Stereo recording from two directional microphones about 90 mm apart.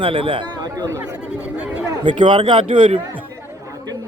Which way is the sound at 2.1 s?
65° right (ahead or behind).